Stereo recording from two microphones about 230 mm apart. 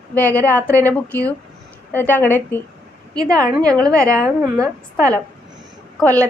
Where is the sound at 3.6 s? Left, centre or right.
Centre.